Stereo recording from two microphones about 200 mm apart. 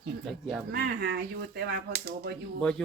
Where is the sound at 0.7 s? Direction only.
55° right (ahead or behind).